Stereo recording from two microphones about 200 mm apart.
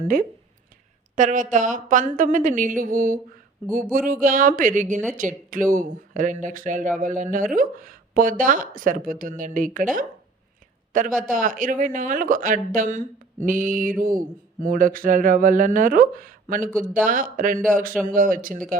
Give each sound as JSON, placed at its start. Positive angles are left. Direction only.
{"t": 1.1, "sound": "speech", "side_deg": -40}